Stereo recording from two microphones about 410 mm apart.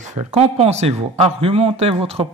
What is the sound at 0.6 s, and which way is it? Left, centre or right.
Speech, centre.